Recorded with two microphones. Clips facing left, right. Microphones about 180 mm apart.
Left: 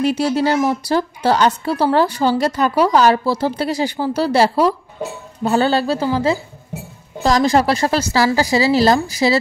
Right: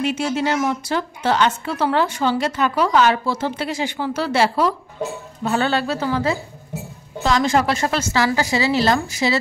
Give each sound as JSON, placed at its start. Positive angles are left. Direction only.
{"t": 0.0, "sound": "a woman's voice", "side_deg": 35}